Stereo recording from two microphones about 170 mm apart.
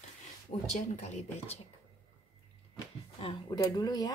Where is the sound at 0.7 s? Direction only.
40° left (ahead or behind).